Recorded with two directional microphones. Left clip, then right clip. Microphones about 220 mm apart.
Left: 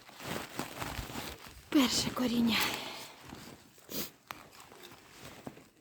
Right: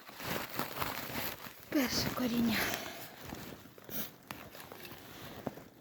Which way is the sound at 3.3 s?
45° right (ahead or behind).